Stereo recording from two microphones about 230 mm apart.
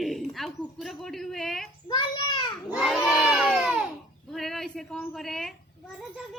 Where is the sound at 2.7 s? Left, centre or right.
Centre.